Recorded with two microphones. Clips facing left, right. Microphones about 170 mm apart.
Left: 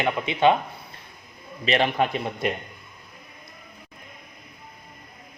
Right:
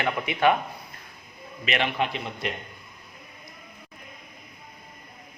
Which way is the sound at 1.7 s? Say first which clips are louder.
Left 4 dB; 40° left (ahead or behind).